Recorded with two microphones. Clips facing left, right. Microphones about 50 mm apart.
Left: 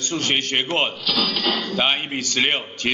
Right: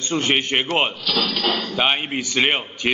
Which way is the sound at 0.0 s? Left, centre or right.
Right.